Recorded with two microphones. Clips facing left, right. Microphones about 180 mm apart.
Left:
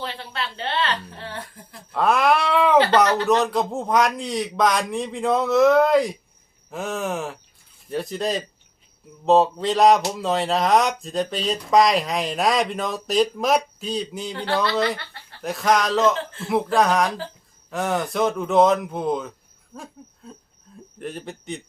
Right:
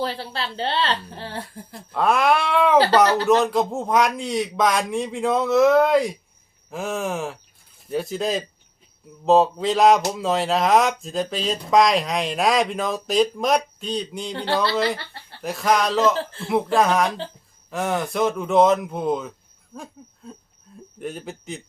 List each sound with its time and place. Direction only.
0.0 s speech: 35° right (ahead or behind)
1.9 s speech: centre (ahead or behind)
15.4 s speech: centre (ahead or behind)
16.1 s speech: 30° right (ahead or behind)
16.5 s speech: centre (ahead or behind)
19.7 s a sound: centre (ahead or behind)
21.0 s speech: centre (ahead or behind)